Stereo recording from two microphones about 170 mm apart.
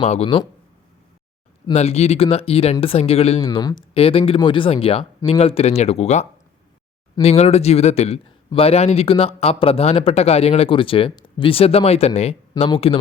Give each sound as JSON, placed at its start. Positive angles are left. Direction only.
{"t": 0.0, "sound": "speech", "side_deg": 35}
{"t": 1.7, "sound": "speech", "side_deg": 40}
{"t": 3.5, "sound": "speech", "side_deg": 25}